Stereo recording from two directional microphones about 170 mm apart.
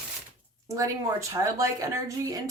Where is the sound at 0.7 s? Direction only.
20° right (ahead or behind).